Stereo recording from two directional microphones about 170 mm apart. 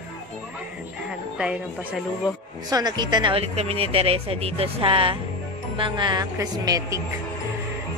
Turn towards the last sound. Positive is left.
turn(degrees=-20)  # may be behind; listen again after turning